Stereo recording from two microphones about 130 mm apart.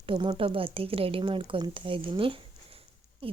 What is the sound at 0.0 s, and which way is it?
A woman's voice, 40° right (ahead or behind).